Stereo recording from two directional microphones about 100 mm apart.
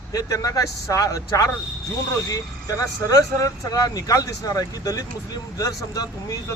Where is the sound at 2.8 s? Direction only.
35° left (ahead or behind).